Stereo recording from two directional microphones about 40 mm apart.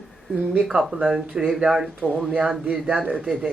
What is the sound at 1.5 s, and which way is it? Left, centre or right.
Speech, centre.